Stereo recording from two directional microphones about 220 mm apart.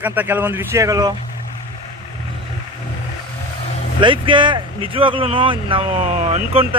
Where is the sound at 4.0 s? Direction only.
20° right (ahead or behind).